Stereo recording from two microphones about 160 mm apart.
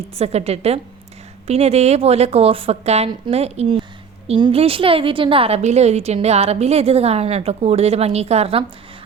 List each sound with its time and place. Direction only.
0.2 s a woman's voice: 40° right (ahead or behind)